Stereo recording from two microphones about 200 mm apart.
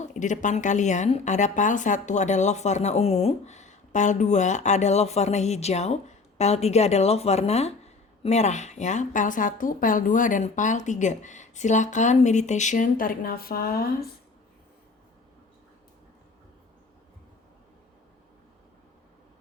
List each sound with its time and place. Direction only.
0.1 s a woman's voice: 40° left (ahead or behind)